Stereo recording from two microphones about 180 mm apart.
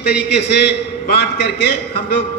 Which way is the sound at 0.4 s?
70° left (ahead or behind).